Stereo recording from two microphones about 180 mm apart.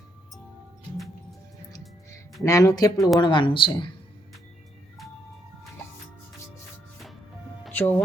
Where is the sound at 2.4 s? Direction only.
15° left (ahead or behind).